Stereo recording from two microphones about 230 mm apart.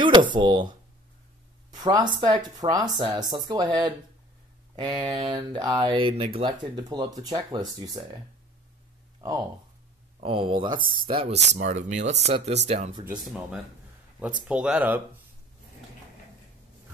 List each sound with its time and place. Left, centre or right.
0.0 s speech: centre
1.8 s speech: centre
10.2 s speech: right
14.5 s speech: centre